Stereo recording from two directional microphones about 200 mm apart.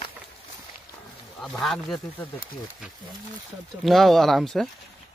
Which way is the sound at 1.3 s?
Centre (ahead or behind).